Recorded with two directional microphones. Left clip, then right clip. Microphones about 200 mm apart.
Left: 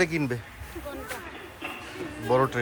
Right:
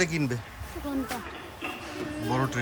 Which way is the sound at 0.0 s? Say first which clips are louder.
Left 2 dB; 5° right (ahead or behind).